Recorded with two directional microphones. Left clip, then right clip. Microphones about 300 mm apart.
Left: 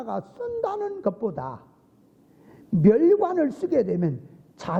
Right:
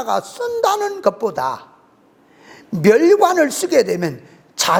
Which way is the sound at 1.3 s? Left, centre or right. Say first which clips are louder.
Right 13 dB; centre.